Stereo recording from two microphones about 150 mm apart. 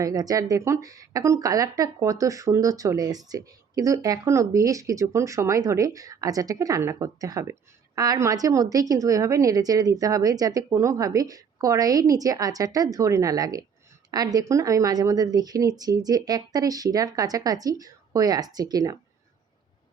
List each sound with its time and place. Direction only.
0.0 s speech: 25° right (ahead or behind)